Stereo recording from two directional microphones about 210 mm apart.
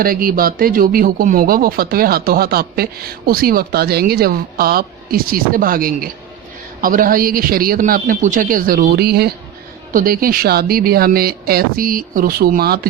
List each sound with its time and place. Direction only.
0.0 s speech: 45° right (ahead or behind)